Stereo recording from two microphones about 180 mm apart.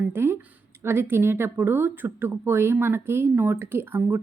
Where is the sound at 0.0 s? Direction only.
10° right (ahead or behind).